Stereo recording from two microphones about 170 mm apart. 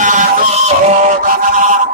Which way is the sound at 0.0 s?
50° right (ahead or behind).